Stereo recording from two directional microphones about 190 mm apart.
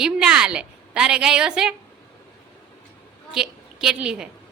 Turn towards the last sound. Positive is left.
turn(degrees=-5)  # may be behind; listen again after turning